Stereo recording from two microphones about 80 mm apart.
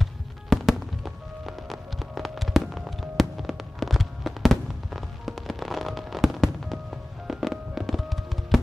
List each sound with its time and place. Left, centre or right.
0.0 s music: centre